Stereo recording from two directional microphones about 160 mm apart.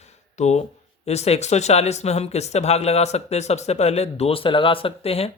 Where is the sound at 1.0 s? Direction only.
40° left (ahead or behind).